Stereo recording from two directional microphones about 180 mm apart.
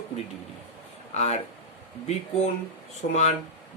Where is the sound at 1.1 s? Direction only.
40° left (ahead or behind).